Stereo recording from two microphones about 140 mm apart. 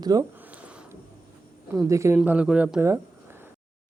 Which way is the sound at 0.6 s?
10° right (ahead or behind).